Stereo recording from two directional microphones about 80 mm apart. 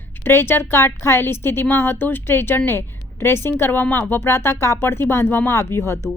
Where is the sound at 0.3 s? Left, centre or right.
Left.